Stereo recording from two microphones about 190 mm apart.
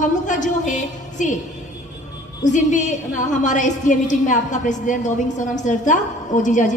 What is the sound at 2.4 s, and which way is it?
A woman's voice, 40° left (ahead or behind).